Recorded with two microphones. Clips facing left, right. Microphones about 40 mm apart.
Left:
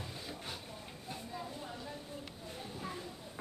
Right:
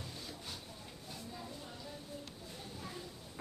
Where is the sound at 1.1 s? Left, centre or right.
Left.